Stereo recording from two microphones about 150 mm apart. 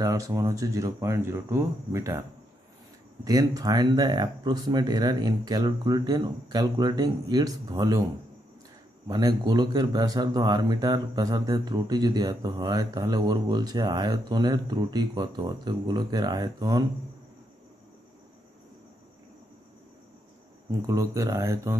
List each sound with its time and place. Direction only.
0.0 s a man's voice: 25° right (ahead or behind)
3.3 s a man's voice: 25° right (ahead or behind)
9.0 s a man's voice: 25° right (ahead or behind)
20.8 s a man's voice: 20° right (ahead or behind)